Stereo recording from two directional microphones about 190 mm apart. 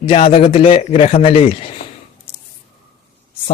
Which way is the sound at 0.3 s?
30° left (ahead or behind).